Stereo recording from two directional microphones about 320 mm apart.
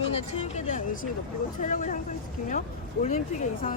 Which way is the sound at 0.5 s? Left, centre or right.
Left.